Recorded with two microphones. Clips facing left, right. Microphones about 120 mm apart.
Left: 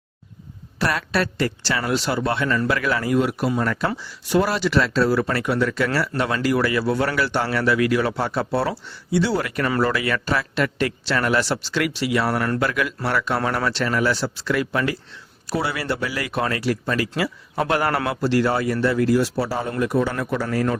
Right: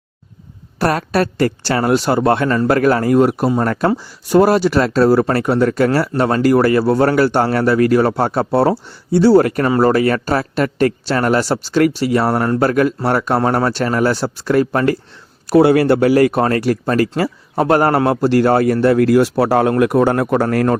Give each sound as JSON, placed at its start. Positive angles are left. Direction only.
{"t": 0.8, "sound": "speech", "side_deg": -45}
{"t": 9.6, "sound": "speech", "side_deg": -30}
{"t": 9.9, "sound": "speech", "side_deg": -40}